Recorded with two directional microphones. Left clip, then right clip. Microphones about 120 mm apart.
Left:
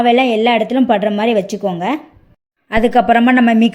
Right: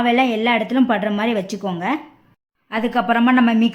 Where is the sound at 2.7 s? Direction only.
40° left (ahead or behind).